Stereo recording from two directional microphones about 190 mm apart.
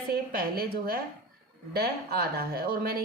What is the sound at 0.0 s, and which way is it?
A woman's voice, 55° right (ahead or behind).